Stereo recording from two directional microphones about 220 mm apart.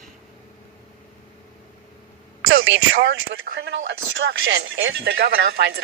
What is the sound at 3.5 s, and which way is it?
Speech, 40° right (ahead or behind).